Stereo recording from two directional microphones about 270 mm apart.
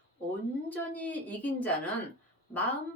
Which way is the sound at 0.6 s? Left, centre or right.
Centre.